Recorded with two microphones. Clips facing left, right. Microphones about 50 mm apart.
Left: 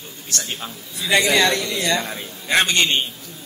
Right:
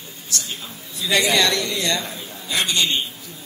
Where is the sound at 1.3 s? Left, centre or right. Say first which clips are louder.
Left 1 dB; left.